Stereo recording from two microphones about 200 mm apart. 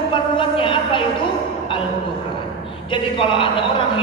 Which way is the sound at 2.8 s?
25° left (ahead or behind).